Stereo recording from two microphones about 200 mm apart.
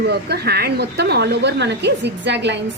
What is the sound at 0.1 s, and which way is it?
Speech, 55° right (ahead or behind).